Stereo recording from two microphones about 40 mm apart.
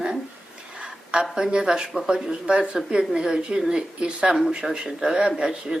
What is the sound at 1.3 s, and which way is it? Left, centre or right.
Speech, centre.